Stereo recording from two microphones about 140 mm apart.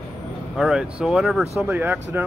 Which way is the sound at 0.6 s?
5° right (ahead or behind).